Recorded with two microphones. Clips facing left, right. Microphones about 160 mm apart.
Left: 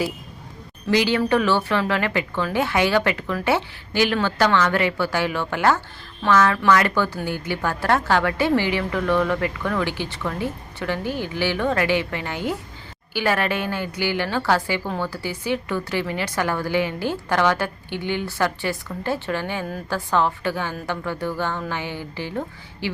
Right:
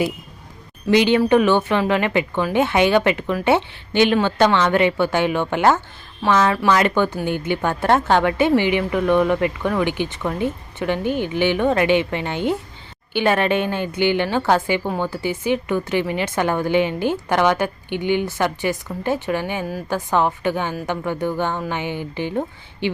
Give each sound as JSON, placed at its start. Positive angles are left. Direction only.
{"t": 0.9, "sound": "a woman's voice", "side_deg": -20}